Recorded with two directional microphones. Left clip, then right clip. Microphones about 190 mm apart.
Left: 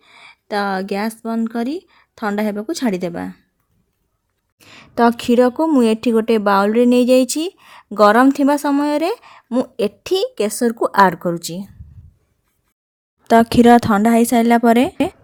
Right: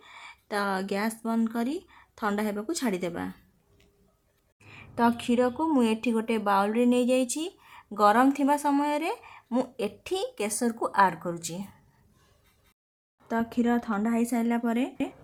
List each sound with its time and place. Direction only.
0.0 s speech: 30° left (ahead or behind)
4.5 s a woman's voice: 45° left (ahead or behind)
13.2 s a woman's voice: 50° left (ahead or behind)